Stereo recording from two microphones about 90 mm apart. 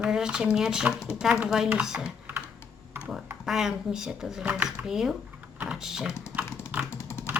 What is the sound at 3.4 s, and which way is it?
A woman's voice, 5° right (ahead or behind).